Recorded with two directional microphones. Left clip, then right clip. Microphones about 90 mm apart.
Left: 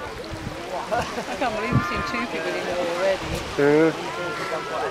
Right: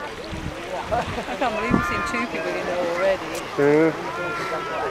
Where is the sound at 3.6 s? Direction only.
5° left (ahead or behind).